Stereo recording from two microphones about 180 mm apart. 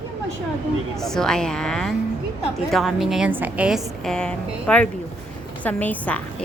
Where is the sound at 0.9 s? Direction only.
5° left (ahead or behind).